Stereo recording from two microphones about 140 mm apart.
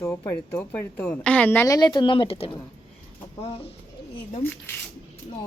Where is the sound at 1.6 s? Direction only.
30° left (ahead or behind).